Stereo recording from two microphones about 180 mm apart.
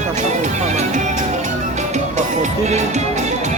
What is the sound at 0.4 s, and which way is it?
Music, 40° right (ahead or behind).